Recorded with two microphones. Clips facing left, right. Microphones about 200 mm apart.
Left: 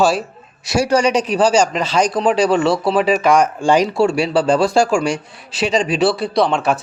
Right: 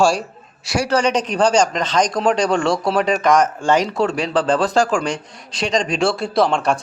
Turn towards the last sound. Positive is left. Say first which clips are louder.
# left 1 dB
turn(degrees=5)  # may be behind; listen again after turning